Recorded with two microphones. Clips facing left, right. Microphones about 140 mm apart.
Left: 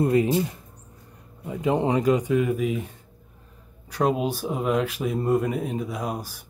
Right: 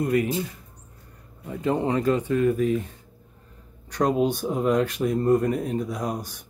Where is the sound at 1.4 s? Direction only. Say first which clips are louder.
Left 1 dB; 15° left (ahead or behind).